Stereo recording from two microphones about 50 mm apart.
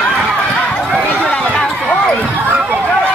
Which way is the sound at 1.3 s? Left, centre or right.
Left.